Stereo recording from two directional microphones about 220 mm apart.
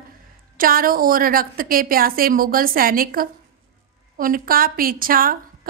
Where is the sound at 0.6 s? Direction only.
40° right (ahead or behind).